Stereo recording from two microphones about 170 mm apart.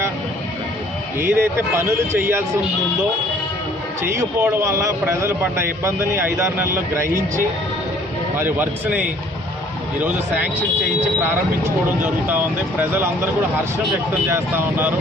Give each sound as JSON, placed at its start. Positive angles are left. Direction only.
{"t": 1.2, "sound": "a man's voice", "side_deg": -15}
{"t": 4.0, "sound": "a man's voice", "side_deg": -15}
{"t": 8.4, "sound": "a man's voice", "side_deg": -10}
{"t": 11.6, "sound": "a man's voice", "side_deg": -10}
{"t": 14.3, "sound": "a man's voice", "side_deg": -15}